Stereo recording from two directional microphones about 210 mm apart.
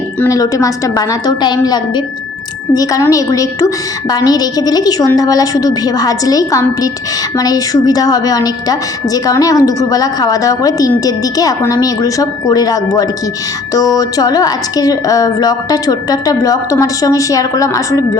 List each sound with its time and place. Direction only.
0.2 s a woman's voice: 15° left (ahead or behind)